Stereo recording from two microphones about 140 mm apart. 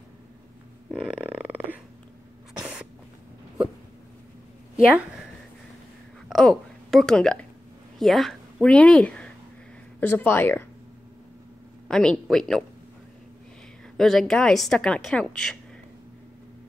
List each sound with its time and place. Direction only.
0.9 s a sound: 10° right (ahead or behind)
6.2 s a woman's voice: centre (ahead or behind)
11.9 s a woman's voice: 5° left (ahead or behind)
13.9 s a woman's voice: 5° left (ahead or behind)